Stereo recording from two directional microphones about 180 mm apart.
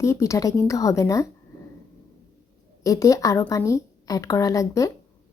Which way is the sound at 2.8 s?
20° left (ahead or behind).